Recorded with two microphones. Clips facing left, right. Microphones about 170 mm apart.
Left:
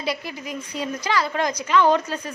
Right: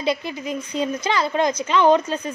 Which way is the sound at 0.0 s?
25° right (ahead or behind).